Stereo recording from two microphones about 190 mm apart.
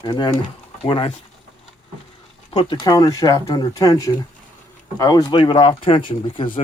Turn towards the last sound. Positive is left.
turn(degrees=25)  # may be behind; listen again after turning